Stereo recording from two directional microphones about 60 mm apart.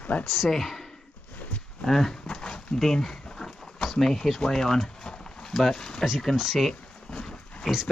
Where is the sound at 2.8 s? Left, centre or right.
Centre.